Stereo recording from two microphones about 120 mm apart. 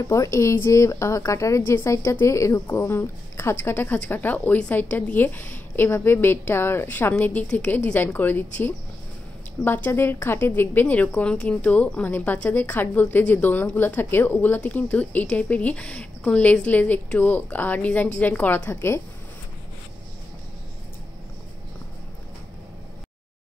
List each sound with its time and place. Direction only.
0.0 s a woman's voice: 25° left (ahead or behind)